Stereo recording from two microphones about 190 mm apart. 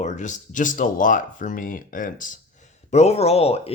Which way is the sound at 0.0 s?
40° left (ahead or behind).